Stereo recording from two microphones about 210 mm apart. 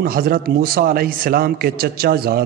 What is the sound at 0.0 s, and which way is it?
A man's voice, 45° right (ahead or behind).